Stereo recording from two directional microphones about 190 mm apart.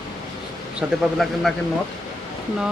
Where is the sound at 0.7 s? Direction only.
Centre (ahead or behind).